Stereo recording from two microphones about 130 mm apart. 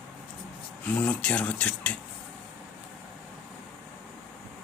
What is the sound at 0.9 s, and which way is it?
Speech, 10° left (ahead or behind).